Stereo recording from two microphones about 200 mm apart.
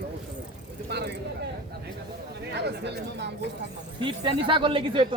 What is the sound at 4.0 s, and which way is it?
Speech, 25° right (ahead or behind).